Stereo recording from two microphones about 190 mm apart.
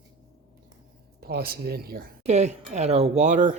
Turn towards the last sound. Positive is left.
turn(degrees=-40)  # may be behind; listen again after turning